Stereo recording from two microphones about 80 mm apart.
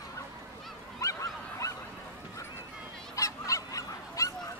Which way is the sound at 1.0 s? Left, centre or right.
Left.